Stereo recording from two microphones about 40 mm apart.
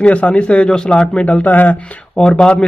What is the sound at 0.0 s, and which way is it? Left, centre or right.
Speech, left.